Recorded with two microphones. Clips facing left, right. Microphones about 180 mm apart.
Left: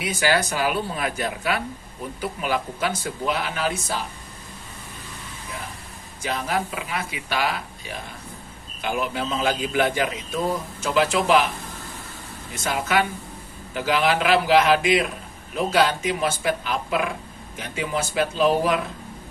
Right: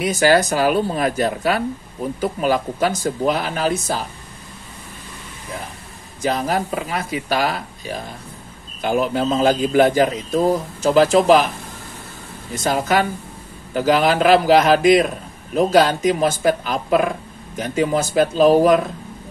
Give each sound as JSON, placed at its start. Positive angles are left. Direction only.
{"t": 0.0, "sound": "a man's voice", "side_deg": -40}
{"t": 6.2, "sound": "a man's voice", "side_deg": -40}
{"t": 12.5, "sound": "a man's voice", "side_deg": -40}